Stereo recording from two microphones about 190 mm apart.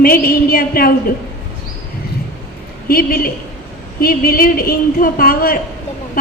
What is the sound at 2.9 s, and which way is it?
A woman's voice, 50° left (ahead or behind).